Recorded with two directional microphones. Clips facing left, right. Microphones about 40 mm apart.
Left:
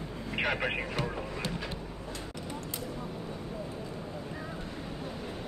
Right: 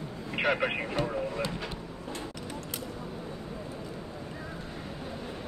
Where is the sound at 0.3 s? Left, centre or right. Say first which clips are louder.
Right 3 dB; centre.